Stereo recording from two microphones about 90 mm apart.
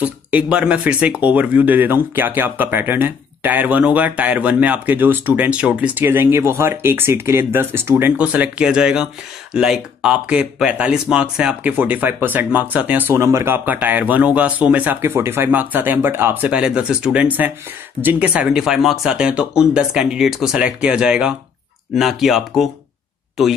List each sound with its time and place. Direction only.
0.0 s speech: 15° right (ahead or behind)
8.2 s speech: 15° right (ahead or behind)
13.2 s speech: 30° right (ahead or behind)
13.7 s speech: 20° right (ahead or behind)
16.4 s speech: 15° right (ahead or behind)